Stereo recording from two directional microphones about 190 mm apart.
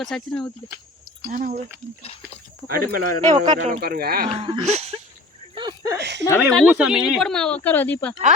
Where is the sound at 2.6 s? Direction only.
50° right (ahead or behind).